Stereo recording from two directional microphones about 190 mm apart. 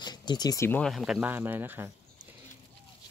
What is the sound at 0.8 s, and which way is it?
Speech, centre (ahead or behind).